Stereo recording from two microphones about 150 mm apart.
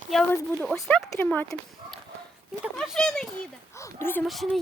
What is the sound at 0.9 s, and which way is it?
Speech, 10° left (ahead or behind).